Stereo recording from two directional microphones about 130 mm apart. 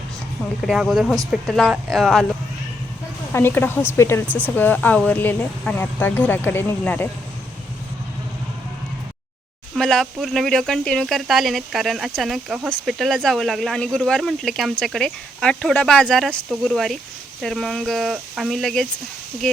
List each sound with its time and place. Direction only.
0.7 s speech: 5° right (ahead or behind)
3.3 s speech: 15° left (ahead or behind)
9.7 s speech: 5° left (ahead or behind)